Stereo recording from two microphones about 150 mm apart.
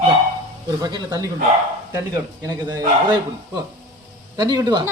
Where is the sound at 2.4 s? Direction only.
25° right (ahead or behind).